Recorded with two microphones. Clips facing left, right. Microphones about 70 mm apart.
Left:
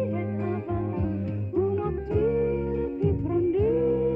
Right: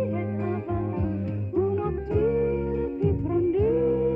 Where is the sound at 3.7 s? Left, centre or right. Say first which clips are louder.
Right 1 dB; right.